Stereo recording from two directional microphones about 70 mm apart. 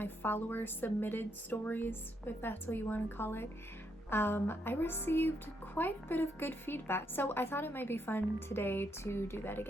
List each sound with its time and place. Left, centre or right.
0.0 s a woman's voice: left